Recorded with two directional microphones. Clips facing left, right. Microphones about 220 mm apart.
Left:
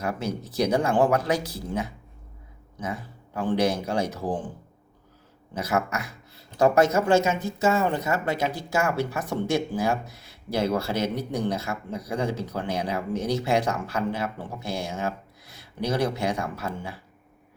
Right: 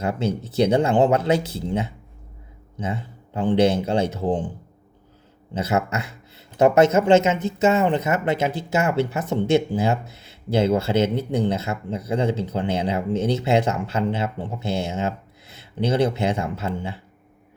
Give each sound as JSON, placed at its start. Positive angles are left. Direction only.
{"t": 0.0, "sound": "speech", "side_deg": -25}
{"t": 5.5, "sound": "speech", "side_deg": -25}